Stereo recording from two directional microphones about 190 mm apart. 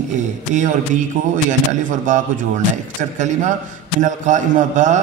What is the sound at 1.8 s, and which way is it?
A man's voice, 40° right (ahead or behind).